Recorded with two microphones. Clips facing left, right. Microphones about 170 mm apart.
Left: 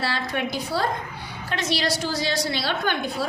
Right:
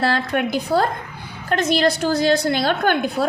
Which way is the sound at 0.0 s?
50° right (ahead or behind).